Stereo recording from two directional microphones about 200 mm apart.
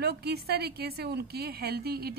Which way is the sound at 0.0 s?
55° right (ahead or behind).